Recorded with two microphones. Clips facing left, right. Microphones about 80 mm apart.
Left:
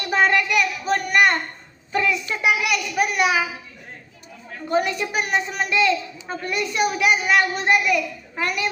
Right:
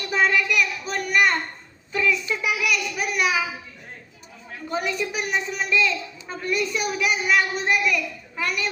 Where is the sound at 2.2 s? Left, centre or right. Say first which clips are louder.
Left 3 dB; left.